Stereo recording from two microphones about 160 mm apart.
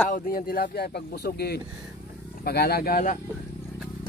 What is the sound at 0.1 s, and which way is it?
Speech, 65° left (ahead or behind).